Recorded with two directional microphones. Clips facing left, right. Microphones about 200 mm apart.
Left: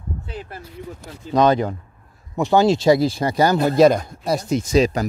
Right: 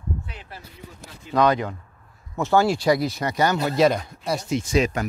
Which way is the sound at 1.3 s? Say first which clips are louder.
Left 4 dB; 25° left (ahead or behind).